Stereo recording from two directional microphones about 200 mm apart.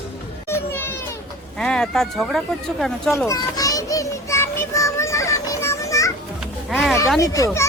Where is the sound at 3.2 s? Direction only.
15° left (ahead or behind).